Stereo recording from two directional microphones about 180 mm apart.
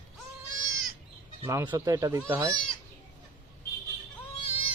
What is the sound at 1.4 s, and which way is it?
Speech, 15° right (ahead or behind).